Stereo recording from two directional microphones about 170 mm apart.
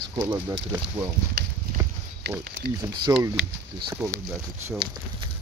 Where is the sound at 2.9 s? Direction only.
25° right (ahead or behind).